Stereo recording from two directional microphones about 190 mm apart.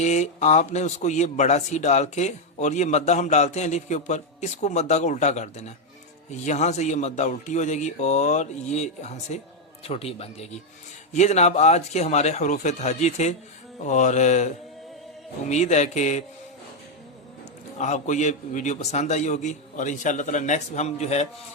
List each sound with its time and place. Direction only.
0.0 s a man's voice: 35° left (ahead or behind)
17.7 s a man's voice: 40° left (ahead or behind)